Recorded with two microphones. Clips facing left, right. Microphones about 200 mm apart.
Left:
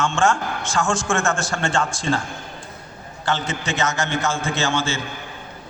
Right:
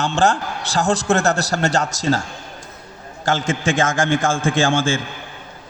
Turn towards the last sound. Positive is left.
turn(degrees=-50)  # may be behind; listen again after turning